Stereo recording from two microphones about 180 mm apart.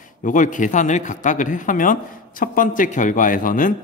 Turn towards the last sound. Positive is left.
turn(degrees=50)  # may be behind; listen again after turning